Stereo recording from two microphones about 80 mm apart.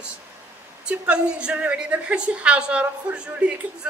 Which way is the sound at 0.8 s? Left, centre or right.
Centre.